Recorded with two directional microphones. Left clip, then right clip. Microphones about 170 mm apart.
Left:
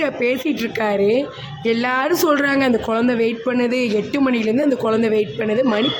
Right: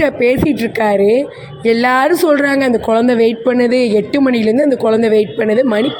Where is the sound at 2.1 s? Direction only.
15° right (ahead or behind).